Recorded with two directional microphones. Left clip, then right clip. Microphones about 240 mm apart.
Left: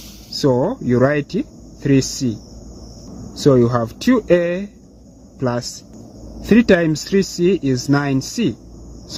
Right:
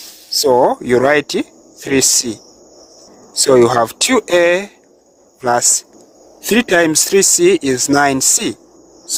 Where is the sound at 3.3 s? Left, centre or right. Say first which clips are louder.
Right 5 dB; right.